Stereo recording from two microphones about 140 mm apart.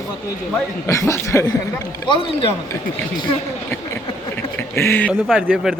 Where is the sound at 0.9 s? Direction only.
20° left (ahead or behind).